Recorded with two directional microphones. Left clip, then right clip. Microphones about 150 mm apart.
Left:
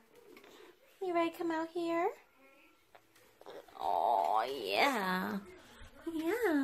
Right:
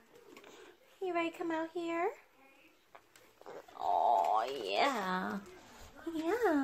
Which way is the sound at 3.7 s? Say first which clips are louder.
Right 1 dB; 50° left (ahead or behind).